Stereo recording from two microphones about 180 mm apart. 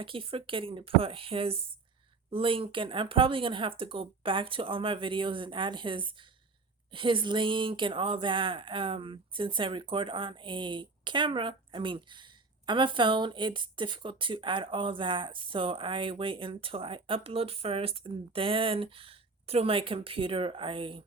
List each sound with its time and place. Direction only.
0.0 s speech: 30° right (ahead or behind)